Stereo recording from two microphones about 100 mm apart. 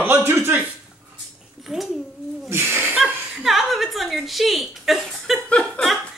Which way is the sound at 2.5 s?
25° right (ahead or behind).